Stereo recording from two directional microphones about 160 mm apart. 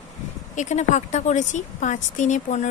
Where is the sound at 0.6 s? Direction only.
45° left (ahead or behind).